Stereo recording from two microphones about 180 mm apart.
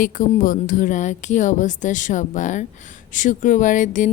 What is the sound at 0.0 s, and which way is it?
A woman's voice, 45° left (ahead or behind).